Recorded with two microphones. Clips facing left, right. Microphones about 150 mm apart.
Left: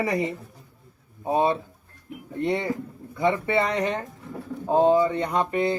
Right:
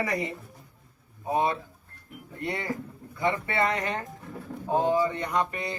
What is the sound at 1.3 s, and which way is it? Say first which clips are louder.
Speech: left 4 dB; 25° left (ahead or behind).